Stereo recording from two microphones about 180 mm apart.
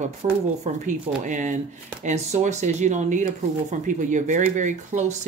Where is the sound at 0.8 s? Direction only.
45° right (ahead or behind).